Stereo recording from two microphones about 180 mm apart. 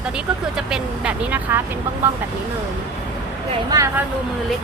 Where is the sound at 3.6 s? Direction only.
20° right (ahead or behind).